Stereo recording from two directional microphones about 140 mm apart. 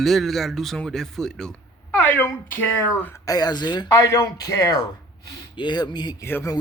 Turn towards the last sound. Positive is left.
turn(degrees=20)  # may be behind; listen again after turning